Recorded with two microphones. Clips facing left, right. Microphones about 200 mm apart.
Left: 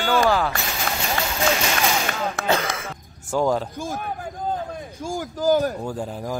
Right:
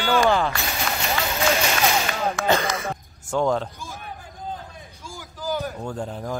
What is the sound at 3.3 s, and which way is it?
Speech, 5° left (ahead or behind).